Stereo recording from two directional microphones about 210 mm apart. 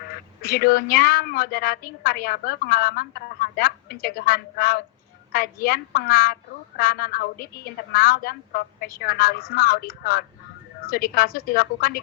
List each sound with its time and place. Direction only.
0.4 s a woman's voice: 45° left (ahead or behind)